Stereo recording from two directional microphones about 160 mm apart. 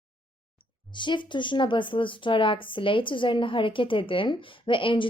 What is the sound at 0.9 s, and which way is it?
Speech, 30° left (ahead or behind).